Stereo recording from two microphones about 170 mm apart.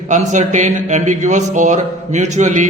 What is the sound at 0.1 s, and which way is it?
Speech, 45° right (ahead or behind).